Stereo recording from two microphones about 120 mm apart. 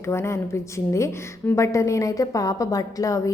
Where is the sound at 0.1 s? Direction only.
20° left (ahead or behind).